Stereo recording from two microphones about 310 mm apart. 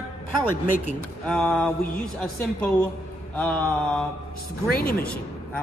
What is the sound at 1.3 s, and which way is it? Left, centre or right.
A man's voice, centre.